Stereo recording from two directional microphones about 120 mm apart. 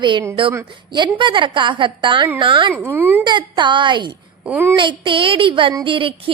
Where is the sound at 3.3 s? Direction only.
40° right (ahead or behind).